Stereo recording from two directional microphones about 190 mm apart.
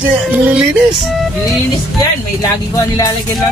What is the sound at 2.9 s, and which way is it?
Speech, 20° left (ahead or behind).